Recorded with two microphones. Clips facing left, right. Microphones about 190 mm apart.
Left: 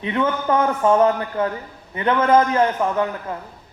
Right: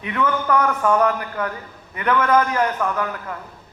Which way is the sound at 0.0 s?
25° left (ahead or behind).